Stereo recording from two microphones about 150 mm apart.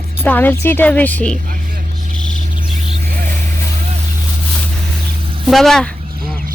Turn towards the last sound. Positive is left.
turn(degrees=5)  # may be behind; listen again after turning